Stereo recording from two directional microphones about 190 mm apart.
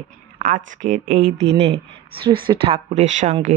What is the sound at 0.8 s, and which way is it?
Speech, 40° right (ahead or behind).